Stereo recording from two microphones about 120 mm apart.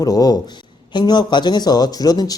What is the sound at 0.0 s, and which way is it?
Speech, 30° left (ahead or behind).